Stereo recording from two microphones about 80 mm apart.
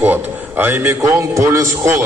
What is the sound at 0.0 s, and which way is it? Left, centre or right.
Speech, right.